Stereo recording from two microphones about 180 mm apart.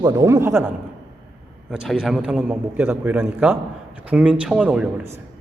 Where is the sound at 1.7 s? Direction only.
Centre (ahead or behind).